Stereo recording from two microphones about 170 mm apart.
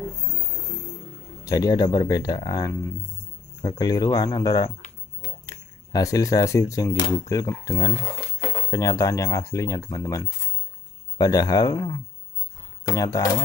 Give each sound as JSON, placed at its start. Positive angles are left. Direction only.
{"t": 1.4, "sound": "speech", "side_deg": 20}